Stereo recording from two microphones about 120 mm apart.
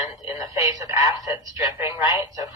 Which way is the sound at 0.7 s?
30° right (ahead or behind).